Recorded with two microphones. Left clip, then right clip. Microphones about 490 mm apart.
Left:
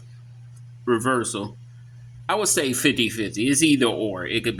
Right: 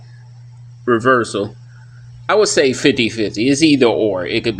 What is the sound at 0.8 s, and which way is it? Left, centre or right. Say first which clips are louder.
Speech: right 9 dB; left.